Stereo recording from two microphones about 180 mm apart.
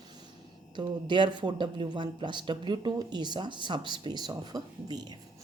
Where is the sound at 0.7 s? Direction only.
25° right (ahead or behind).